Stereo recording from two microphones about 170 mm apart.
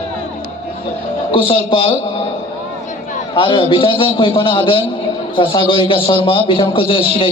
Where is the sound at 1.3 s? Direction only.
30° left (ahead or behind).